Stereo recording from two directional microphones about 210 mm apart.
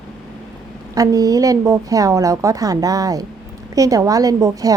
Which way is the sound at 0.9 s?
15° right (ahead or behind).